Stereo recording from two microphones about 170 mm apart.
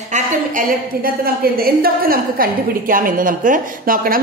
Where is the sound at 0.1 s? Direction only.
50° right (ahead or behind).